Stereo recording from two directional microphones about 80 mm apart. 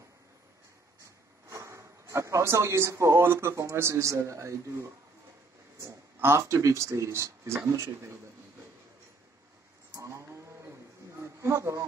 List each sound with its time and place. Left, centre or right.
1.5 s speech: right
6.1 s speech: right
9.9 s a sound: right